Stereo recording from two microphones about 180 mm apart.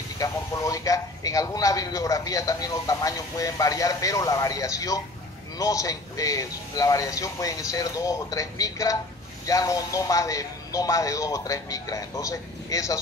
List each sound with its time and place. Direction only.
0.2 s a man's voice: 20° left (ahead or behind)